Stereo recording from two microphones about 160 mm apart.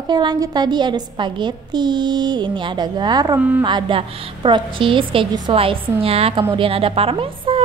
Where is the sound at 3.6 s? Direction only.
30° right (ahead or behind).